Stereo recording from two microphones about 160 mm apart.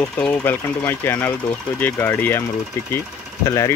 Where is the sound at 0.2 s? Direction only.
15° left (ahead or behind).